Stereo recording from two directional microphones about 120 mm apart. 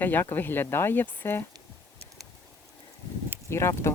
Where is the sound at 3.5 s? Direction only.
25° left (ahead or behind).